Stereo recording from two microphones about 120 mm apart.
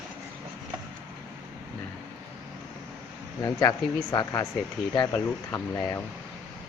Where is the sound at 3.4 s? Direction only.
30° left (ahead or behind).